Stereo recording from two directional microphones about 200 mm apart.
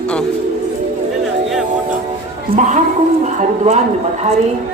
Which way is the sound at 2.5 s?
40° right (ahead or behind).